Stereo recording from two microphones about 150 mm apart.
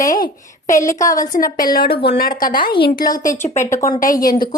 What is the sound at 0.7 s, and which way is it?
Speech, 20° left (ahead or behind).